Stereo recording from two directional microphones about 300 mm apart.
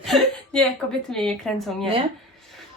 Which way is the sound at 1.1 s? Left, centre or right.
Centre.